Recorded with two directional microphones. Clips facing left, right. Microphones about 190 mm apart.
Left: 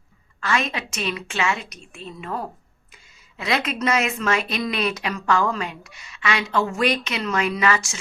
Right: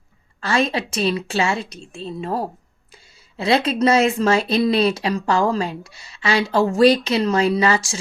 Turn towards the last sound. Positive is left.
turn(degrees=-30)  # may be behind; listen again after turning